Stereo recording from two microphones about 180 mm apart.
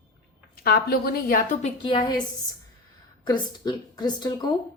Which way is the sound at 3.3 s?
20° left (ahead or behind).